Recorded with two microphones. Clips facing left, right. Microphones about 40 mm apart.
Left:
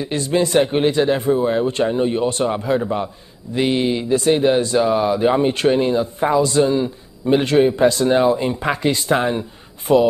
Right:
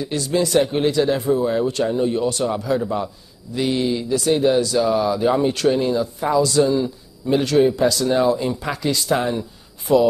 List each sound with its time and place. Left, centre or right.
0.0 s speech: left